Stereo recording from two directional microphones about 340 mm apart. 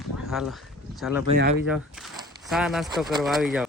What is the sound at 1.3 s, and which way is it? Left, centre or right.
Speech, centre.